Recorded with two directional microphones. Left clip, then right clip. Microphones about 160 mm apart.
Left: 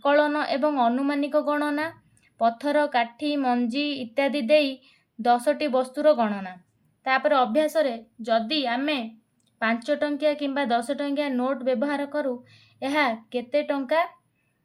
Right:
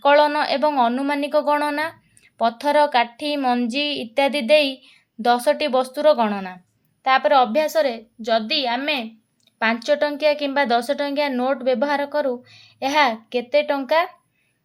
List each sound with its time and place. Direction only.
0.0 s a woman's voice: 20° right (ahead or behind)